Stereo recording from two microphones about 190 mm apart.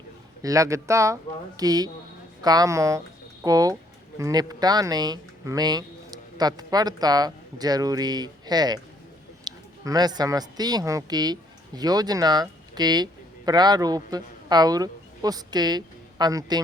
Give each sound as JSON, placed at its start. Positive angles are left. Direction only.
{"t": 0.4, "sound": "speech", "side_deg": -15}